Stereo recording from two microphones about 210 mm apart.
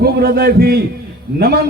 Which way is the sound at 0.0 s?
50° right (ahead or behind).